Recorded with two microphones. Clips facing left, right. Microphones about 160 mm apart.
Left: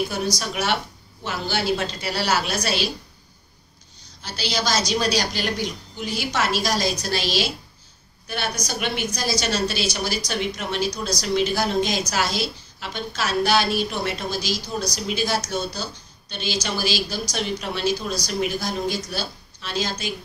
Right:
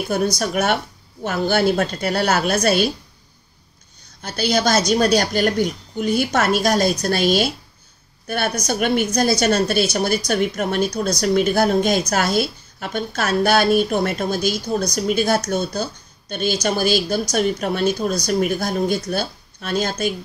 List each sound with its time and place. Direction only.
0.1 s a woman's voice: 50° right (ahead or behind)
4.2 s a woman's voice: 50° right (ahead or behind)